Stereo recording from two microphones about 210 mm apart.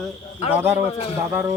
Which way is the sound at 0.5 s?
10° right (ahead or behind).